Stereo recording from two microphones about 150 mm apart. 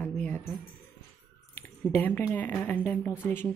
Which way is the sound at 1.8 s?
15° left (ahead or behind).